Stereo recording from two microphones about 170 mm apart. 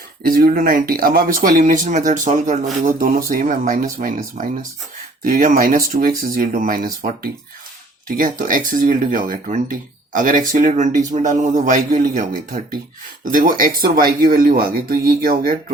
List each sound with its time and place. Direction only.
0.2 s speech: 60° right (ahead or behind)